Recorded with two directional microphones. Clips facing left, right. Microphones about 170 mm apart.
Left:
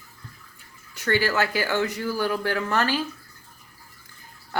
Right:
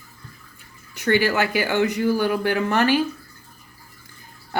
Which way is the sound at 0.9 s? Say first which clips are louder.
Right 4 dB; 15° right (ahead or behind).